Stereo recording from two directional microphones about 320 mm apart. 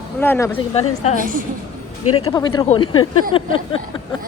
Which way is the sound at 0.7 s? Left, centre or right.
Centre.